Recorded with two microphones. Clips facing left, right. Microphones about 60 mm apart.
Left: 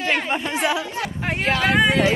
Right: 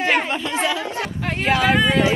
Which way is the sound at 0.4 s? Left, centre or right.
Left.